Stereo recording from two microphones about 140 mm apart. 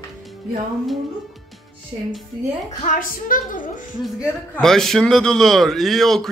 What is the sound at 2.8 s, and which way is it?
Speech, 70° left (ahead or behind).